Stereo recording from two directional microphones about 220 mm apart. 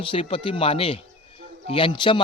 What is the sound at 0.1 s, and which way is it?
A man's voice, 25° left (ahead or behind).